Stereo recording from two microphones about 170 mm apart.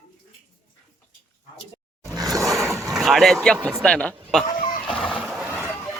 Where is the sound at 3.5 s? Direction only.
10° right (ahead or behind).